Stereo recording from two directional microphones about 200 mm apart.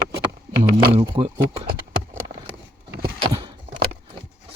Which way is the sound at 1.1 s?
30° right (ahead or behind).